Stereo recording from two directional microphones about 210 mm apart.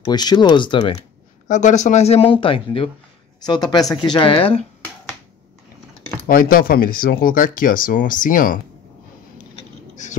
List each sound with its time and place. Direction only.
0.0 s speech: 20° left (ahead or behind)
1.5 s speech: 35° left (ahead or behind)
6.2 s speech: 45° left (ahead or behind)